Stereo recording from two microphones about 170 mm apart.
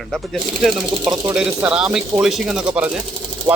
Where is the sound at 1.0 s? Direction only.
25° right (ahead or behind).